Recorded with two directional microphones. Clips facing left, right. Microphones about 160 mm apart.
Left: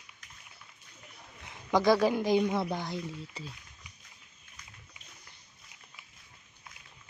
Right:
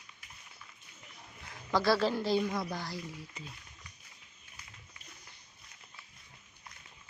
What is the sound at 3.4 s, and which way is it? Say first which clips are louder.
Speech: left 4 dB; 35° left (ahead or behind).